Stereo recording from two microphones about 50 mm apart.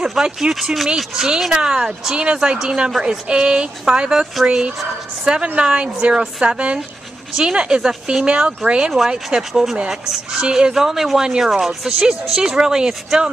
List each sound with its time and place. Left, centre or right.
0.2 s a woman's voice: centre
9.5 s speech: centre